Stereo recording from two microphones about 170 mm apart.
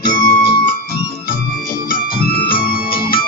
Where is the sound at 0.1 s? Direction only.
20° left (ahead or behind).